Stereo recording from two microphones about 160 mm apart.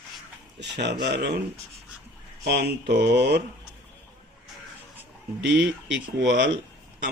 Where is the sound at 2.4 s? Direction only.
90° right.